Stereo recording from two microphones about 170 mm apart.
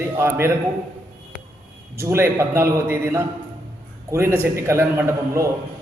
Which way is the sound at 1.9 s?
15° right (ahead or behind).